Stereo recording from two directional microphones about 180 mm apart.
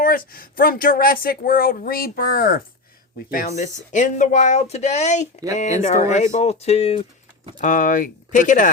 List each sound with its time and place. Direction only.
0.0 s speech: 50° left (ahead or behind); by 7.0 s 35° left (ahead or behind)
7.6 s speech: 50° left (ahead or behind)